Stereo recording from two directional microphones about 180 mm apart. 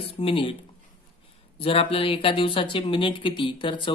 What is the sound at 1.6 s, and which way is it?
Speech, 30° left (ahead or behind).